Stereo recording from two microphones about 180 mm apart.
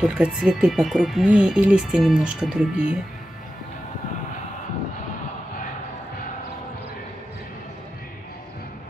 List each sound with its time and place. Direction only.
0.0 s speech: 5° right (ahead or behind)